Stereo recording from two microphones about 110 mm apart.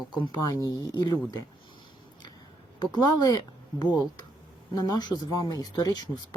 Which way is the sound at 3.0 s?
35° left (ahead or behind).